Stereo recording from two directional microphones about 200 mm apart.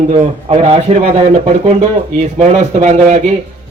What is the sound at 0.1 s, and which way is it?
Speech, 30° right (ahead or behind).